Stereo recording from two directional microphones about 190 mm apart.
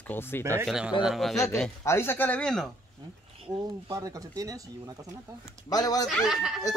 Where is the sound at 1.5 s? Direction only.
15° left (ahead or behind).